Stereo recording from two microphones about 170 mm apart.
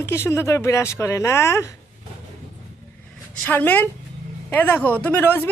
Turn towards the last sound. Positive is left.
turn(degrees=10)  # may be behind; listen again after turning